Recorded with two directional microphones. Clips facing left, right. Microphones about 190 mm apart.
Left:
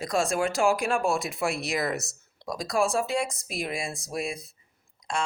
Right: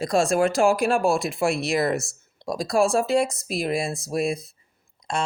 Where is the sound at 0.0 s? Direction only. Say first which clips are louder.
Right 6 dB; 35° right (ahead or behind).